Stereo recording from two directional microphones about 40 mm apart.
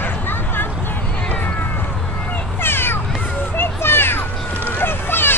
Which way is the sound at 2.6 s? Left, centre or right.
Left.